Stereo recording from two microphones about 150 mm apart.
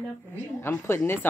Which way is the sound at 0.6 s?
15° left (ahead or behind).